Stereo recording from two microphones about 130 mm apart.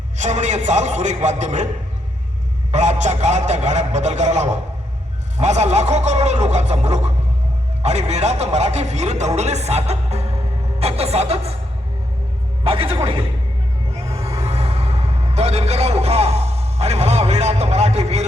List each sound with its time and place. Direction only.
0.2 s a man's voice: 65° right (ahead or behind)
2.7 s a man's voice: 60° right (ahead or behind)
12.6 s speech: 45° right (ahead or behind)
14.4 s music: 50° right (ahead or behind)